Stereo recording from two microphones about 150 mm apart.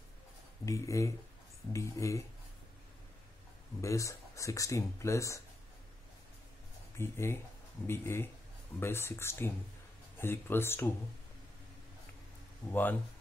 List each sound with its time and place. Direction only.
0.7 s speech: 20° left (ahead or behind)
3.8 s speech: 20° left (ahead or behind)
7.0 s speech: 15° left (ahead or behind)
12.6 s speech: 25° left (ahead or behind)